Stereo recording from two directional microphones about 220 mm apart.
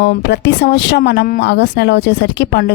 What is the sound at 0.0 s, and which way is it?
Speech, 50° left (ahead or behind).